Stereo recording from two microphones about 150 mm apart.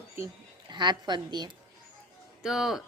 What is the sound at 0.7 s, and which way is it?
Speech, 30° right (ahead or behind).